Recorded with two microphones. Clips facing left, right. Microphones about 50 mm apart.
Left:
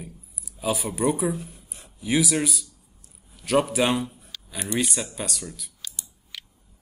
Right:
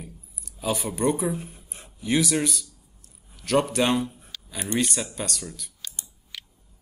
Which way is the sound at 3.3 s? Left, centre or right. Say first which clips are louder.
Left 1 dB; centre.